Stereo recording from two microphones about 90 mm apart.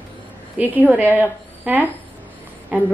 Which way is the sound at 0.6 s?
20° right (ahead or behind).